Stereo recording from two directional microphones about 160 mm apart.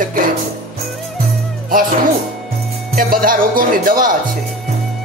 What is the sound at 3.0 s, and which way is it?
Speech, 65° right (ahead or behind).